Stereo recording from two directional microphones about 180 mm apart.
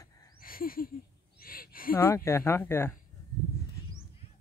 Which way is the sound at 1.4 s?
55° left (ahead or behind).